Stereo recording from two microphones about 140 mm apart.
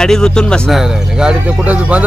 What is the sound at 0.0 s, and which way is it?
Speech, 5° left (ahead or behind).